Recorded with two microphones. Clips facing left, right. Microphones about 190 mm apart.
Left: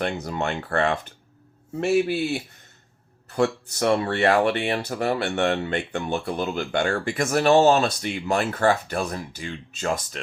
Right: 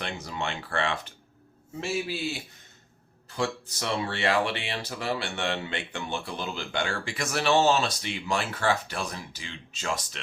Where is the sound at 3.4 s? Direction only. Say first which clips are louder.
Left 8 dB; 50° left (ahead or behind).